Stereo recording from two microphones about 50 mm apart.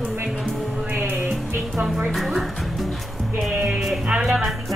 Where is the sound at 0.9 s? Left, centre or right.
Right.